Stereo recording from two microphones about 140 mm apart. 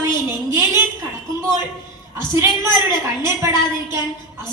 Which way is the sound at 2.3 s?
15° right (ahead or behind).